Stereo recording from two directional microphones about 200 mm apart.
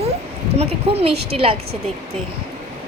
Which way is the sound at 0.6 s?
30° right (ahead or behind).